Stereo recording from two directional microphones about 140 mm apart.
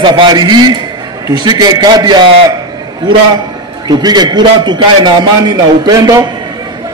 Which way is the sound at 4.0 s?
30° right (ahead or behind).